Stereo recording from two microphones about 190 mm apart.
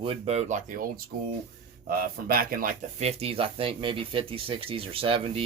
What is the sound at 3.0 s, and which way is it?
Speech, 30° right (ahead or behind).